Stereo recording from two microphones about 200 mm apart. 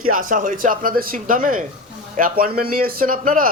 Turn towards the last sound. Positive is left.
turn(degrees=-45)  # may be behind; listen again after turning